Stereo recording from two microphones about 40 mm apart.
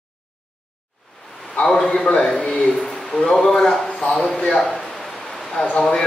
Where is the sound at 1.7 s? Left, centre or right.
Centre.